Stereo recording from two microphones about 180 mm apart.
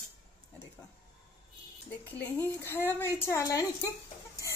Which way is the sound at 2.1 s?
10° left (ahead or behind).